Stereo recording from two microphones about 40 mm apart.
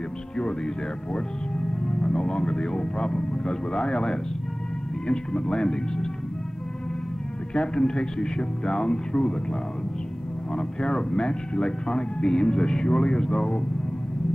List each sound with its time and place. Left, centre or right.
1.1 s speech: centre
7.5 s speech: left